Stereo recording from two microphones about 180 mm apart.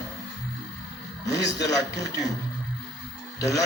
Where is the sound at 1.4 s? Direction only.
20° left (ahead or behind).